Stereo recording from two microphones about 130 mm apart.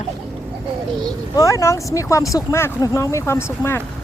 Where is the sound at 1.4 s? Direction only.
25° left (ahead or behind).